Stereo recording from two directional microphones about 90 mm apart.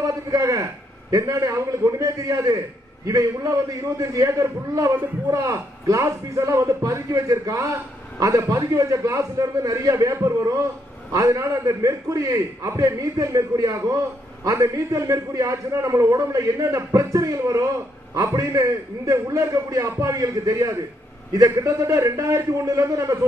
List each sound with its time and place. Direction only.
0.0 s a man's voice: 35° right (ahead or behind)